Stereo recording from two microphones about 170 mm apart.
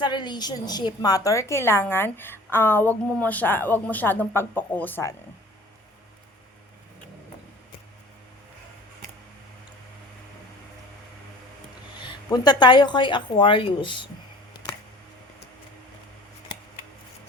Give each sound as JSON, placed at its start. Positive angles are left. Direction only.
{"t": 0.0, "sound": "a woman's voice", "side_deg": 25}
{"t": 11.9, "sound": "speech", "side_deg": 25}